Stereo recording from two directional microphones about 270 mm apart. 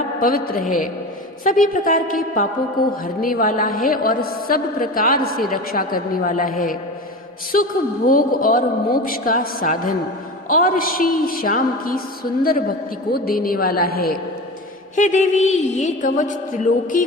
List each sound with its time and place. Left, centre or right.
0.2 s a woman's voice: left